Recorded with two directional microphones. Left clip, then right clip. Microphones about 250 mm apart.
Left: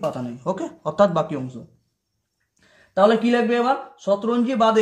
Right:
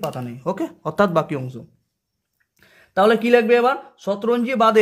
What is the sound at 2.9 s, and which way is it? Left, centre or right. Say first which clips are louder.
Speech: right 2 dB; right.